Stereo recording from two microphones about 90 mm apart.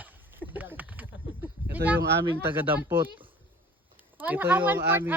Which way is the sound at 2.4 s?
25° right (ahead or behind).